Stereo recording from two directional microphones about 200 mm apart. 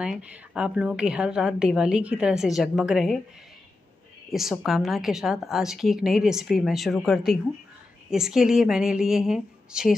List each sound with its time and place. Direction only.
0.0 s a woman's voice: 5° right (ahead or behind)
4.3 s a woman's voice: centre (ahead or behind)